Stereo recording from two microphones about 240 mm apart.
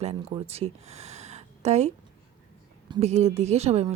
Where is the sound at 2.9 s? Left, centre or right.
Right.